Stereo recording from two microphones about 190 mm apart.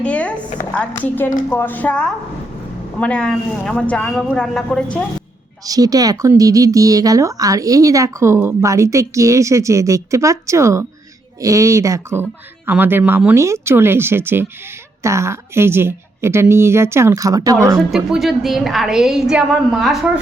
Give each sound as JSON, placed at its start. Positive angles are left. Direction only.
{"t": 0.0, "sound": "chopping", "side_deg": 5}
{"t": 0.6, "sound": "a woman's voice", "side_deg": 10}
{"t": 5.6, "sound": "speech", "side_deg": -20}
{"t": 17.9, "sound": "a woman's voice", "side_deg": 0}